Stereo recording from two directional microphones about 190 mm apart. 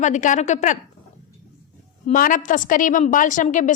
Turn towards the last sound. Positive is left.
turn(degrees=40)  # may be behind; listen again after turning